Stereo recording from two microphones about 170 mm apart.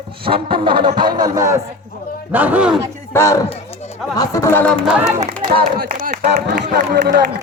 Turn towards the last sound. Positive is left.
turn(degrees=-65)  # may be behind; listen again after turning